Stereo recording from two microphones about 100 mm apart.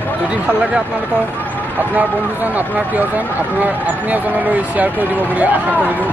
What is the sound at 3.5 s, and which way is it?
Speech, 15° right (ahead or behind).